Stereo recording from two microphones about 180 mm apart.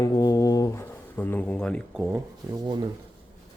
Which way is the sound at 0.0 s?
20° left (ahead or behind).